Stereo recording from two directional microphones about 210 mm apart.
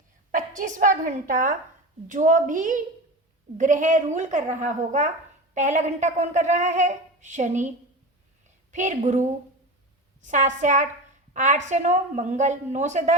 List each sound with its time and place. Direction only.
0.6 s a woman's voice: 40° right (ahead or behind)
8.7 s a woman's voice: 35° right (ahead or behind)